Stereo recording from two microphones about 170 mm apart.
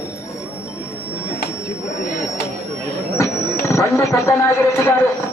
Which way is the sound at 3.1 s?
15° left (ahead or behind).